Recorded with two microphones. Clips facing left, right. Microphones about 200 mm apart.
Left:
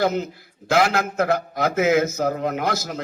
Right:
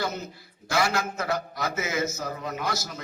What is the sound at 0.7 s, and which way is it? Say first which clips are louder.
A man's voice: left 6 dB; 55° left (ahead or behind).